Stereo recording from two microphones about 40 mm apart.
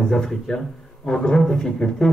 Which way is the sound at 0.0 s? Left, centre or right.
Centre.